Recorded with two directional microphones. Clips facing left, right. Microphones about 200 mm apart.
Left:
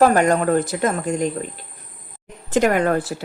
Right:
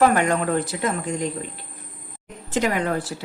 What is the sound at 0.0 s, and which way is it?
Speech, 40° left (ahead or behind).